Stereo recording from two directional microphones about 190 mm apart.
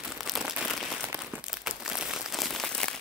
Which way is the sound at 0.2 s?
Centre (ahead or behind).